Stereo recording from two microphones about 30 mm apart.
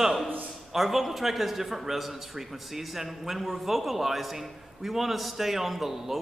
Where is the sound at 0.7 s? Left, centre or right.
Centre.